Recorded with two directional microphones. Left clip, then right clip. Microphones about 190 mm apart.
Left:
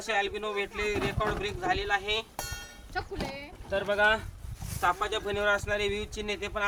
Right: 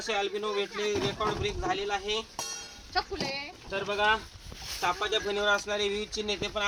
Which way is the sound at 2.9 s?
15° left (ahead or behind).